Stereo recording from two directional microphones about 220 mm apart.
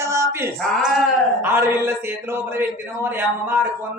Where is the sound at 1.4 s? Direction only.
10° right (ahead or behind).